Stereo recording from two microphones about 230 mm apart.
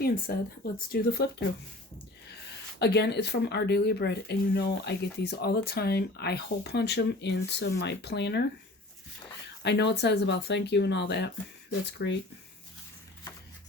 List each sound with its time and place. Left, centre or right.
0.0 s speech: left
2.7 s speech: left
9.6 s speech: left